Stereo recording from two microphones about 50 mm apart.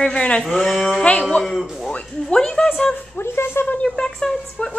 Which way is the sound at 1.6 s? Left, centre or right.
Centre.